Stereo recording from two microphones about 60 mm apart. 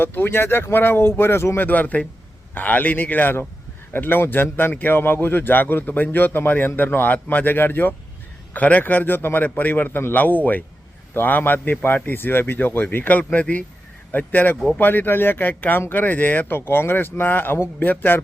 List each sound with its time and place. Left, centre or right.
0.0 s speech: left
16.6 s speech: left